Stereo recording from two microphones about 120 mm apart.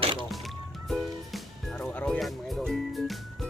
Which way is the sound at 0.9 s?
Centre (ahead or behind).